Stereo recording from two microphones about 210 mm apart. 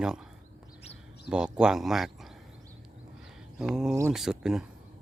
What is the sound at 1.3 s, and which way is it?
Speech, 5° right (ahead or behind).